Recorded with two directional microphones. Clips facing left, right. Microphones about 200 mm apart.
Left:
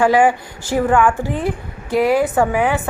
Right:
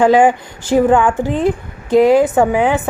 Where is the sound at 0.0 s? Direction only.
20° right (ahead or behind).